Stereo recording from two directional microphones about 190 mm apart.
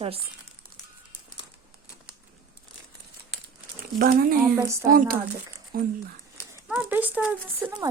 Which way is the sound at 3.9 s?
50° right (ahead or behind).